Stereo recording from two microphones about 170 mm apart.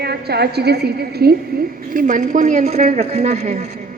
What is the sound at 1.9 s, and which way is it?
A woman's voice, 50° right (ahead or behind).